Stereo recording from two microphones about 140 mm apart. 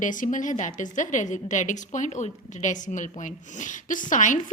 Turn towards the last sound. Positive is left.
turn(degrees=65)  # may be behind; listen again after turning